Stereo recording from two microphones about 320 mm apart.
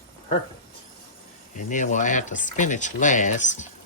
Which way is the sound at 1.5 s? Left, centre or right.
Left.